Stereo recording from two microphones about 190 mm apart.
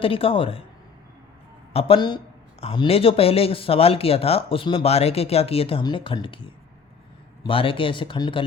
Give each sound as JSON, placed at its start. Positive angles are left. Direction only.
{"t": 0.0, "sound": "speech", "side_deg": 30}
{"t": 1.7, "sound": "speech", "side_deg": 30}